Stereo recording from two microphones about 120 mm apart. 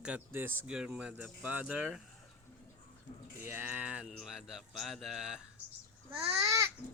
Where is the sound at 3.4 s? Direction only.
20° right (ahead or behind).